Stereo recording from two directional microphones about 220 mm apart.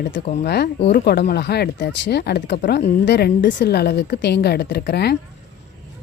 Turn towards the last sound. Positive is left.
turn(degrees=45)  # may be behind; listen again after turning